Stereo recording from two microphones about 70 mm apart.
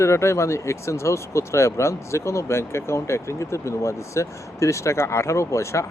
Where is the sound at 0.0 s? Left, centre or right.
Left.